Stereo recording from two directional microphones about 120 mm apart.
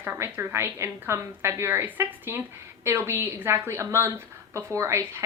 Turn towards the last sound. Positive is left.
turn(degrees=-25)  # may be behind; listen again after turning